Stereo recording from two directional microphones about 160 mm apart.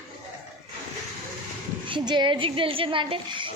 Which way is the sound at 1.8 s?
30° right (ahead or behind).